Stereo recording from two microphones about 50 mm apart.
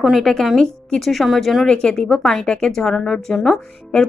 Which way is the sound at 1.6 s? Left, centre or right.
Centre.